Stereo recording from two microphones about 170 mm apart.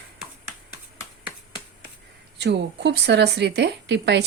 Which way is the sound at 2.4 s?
85° right.